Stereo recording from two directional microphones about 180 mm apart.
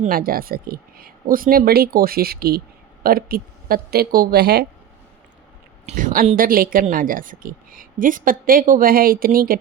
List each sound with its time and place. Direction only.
0.0 s speech: 55° right (ahead or behind)
5.8 s a woman's voice: 40° right (ahead or behind)